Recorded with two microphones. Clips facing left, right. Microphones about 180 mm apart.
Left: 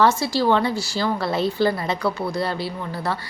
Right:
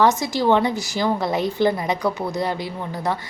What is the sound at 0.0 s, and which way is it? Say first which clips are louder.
A woman's voice: even; 15° right (ahead or behind).